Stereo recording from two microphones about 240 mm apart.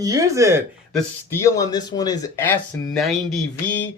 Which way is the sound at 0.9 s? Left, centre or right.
Centre.